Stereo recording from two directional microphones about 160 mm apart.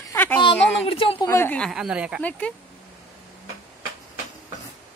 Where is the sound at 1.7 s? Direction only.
5° right (ahead or behind).